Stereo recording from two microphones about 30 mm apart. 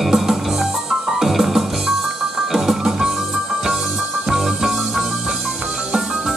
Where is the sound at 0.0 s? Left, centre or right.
Centre.